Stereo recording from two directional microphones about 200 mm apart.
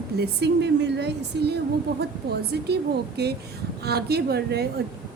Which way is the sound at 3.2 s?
55° right (ahead or behind).